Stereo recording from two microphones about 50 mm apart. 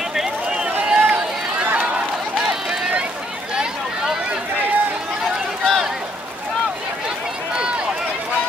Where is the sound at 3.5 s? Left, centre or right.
Centre.